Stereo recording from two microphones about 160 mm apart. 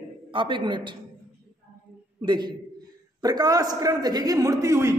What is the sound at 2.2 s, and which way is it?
A man's voice, 25° right (ahead or behind).